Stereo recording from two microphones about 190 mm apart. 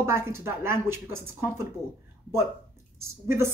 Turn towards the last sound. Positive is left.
turn(degrees=-15)  # may be behind; listen again after turning